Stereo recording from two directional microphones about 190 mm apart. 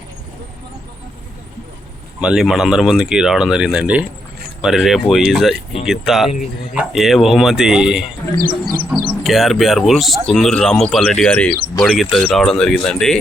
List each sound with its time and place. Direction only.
2.2 s speech: 5° right (ahead or behind)
8.6 s insect: 15° right (ahead or behind)
9.0 s speech: centre (ahead or behind)